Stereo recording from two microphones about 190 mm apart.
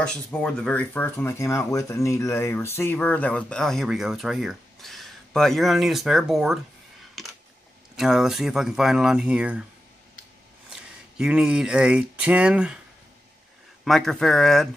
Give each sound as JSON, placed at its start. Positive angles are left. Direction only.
{"t": 0.0, "sound": "speech", "side_deg": 5}
{"t": 7.2, "sound": "a sound", "side_deg": 0}
{"t": 7.9, "sound": "speech", "side_deg": 0}
{"t": 10.7, "sound": "speech", "side_deg": -5}
{"t": 13.8, "sound": "speech", "side_deg": 0}